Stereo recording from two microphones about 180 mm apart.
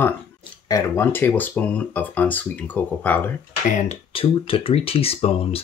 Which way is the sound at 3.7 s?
40° left (ahead or behind).